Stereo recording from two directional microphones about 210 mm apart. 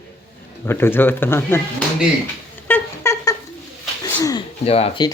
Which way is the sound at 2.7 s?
10° left (ahead or behind).